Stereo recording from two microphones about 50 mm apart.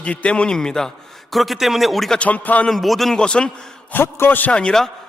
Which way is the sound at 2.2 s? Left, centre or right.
Left.